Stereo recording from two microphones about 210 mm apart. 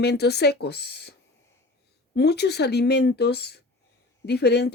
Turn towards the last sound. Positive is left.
turn(degrees=50)  # may be behind; listen again after turning